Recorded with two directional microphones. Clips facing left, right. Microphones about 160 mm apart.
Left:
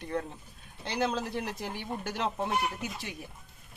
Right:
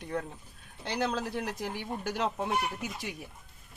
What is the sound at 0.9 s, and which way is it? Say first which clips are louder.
Speech: left 1 dB; 5° left (ahead or behind).